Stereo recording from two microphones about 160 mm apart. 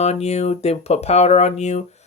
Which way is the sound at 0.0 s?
40° left (ahead or behind).